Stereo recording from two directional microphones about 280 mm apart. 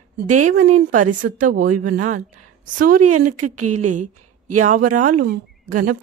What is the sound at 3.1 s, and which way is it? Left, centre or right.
Speech, right.